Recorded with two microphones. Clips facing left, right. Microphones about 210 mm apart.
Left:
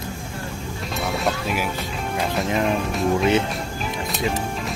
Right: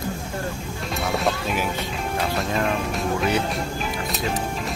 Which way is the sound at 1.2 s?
5° left (ahead or behind).